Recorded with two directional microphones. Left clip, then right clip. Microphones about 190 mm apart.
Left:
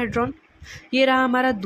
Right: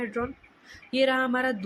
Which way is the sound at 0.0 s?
30° left (ahead or behind).